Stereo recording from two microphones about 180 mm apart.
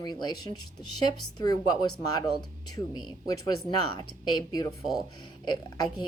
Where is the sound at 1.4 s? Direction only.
25° left (ahead or behind).